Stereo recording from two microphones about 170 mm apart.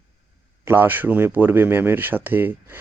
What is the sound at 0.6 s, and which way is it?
Speech, 15° right (ahead or behind).